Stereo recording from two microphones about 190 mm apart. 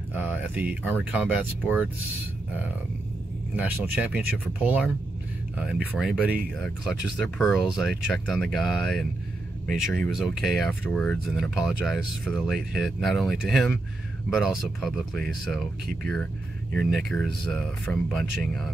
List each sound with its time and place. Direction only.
0.1 s speech: 10° right (ahead or behind)
3.5 s speech: 10° right (ahead or behind)
16.7 s speech: 5° left (ahead or behind)